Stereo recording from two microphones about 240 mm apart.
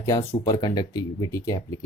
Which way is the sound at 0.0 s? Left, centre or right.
Centre.